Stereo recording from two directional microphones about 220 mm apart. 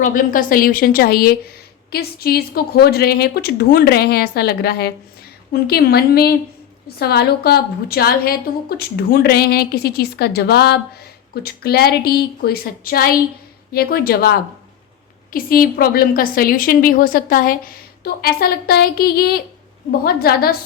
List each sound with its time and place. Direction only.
0.0 s a woman's voice: 35° left (ahead or behind)